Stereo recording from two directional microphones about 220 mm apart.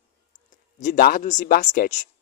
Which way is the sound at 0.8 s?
40° left (ahead or behind).